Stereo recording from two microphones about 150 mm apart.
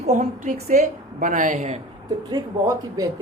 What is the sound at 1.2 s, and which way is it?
Speech, 55° right (ahead or behind).